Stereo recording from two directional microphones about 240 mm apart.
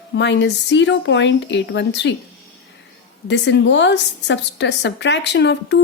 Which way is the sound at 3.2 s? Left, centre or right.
Left.